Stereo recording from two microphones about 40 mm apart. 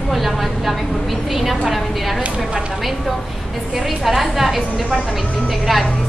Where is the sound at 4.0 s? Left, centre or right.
Centre.